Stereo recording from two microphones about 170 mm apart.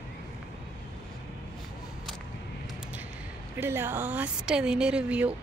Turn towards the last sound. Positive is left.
turn(degrees=-5)  # may be behind; listen again after turning